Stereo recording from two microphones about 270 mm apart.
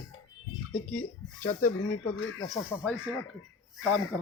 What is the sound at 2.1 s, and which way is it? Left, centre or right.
Speech, left.